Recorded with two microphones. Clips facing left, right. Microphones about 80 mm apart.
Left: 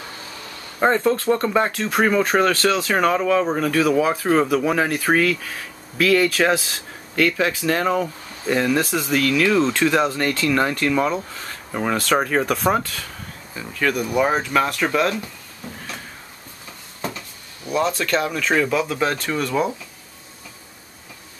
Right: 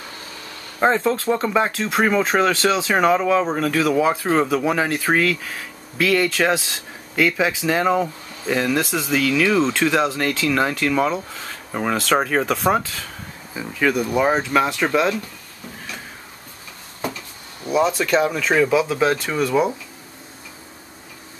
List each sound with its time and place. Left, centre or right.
0.7 s speech: centre
17.6 s speech: centre